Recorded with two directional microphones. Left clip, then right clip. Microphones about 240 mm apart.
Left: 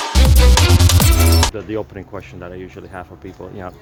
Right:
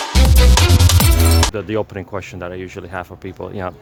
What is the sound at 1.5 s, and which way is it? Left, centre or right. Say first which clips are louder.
Speech: right 3 dB; right.